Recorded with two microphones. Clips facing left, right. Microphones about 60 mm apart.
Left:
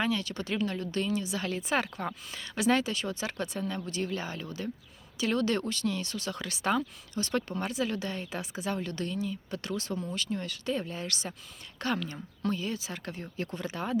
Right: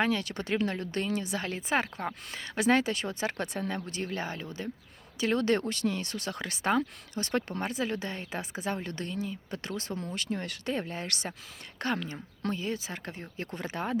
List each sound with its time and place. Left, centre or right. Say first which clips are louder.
0.0 s speech: right 2 dB; right
1.4 s speech: right 1 dB; right
2.3 s speech: right 1 dB; right
7.6 s speech: even; right
11.8 s speech: even; right